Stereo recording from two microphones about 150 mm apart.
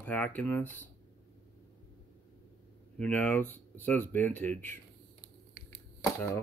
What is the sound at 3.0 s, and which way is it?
Speech, 10° left (ahead or behind).